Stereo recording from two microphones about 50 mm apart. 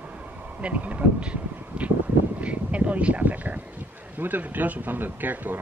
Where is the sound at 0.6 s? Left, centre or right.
Right.